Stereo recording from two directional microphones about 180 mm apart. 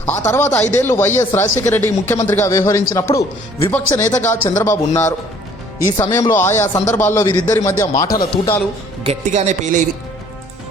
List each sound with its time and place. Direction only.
0.0 s speech: 10° left (ahead or behind)
9.0 s speech: 40° right (ahead or behind)